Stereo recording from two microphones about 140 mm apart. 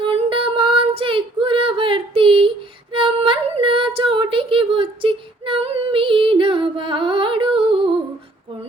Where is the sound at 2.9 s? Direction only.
40° right (ahead or behind).